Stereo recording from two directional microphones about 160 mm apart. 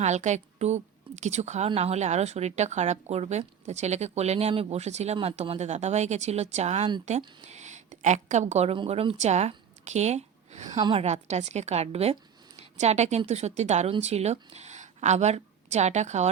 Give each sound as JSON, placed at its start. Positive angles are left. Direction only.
{"t": 0.0, "sound": "a woman's voice", "side_deg": -45}
{"t": 10.7, "sound": "a woman's voice", "side_deg": -30}
{"t": 11.0, "sound": "a woman's voice", "side_deg": -45}